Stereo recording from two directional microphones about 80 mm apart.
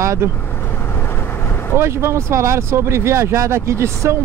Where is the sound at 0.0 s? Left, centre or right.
Right.